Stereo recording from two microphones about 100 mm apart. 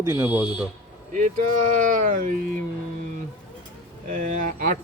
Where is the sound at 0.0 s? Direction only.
30° right (ahead or behind).